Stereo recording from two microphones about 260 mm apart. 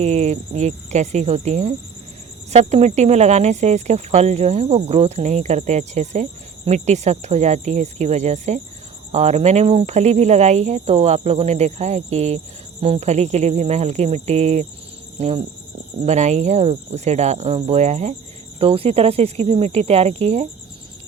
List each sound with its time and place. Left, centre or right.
0.0 s speech: right